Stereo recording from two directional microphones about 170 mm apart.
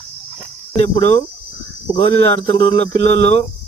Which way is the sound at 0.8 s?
40° left (ahead or behind).